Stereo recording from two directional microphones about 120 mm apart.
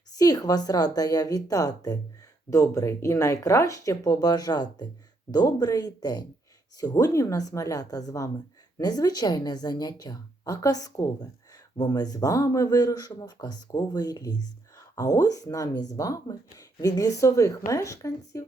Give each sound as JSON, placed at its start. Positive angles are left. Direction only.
{"t": 0.1, "sound": "speech", "side_deg": 30}